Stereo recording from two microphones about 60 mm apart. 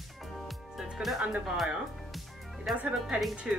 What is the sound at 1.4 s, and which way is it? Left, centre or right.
Speech, centre.